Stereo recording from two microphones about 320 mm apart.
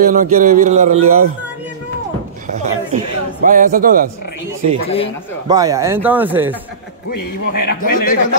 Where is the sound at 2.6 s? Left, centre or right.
Right.